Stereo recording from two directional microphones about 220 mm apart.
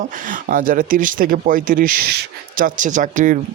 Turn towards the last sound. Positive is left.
turn(degrees=-35)  # may be behind; listen again after turning